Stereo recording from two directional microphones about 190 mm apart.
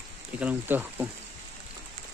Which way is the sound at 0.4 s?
10° right (ahead or behind).